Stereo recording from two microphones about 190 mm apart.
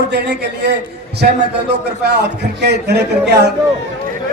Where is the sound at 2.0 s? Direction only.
60° right (ahead or behind).